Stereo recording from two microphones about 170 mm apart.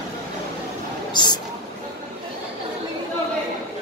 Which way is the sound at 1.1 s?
25° left (ahead or behind).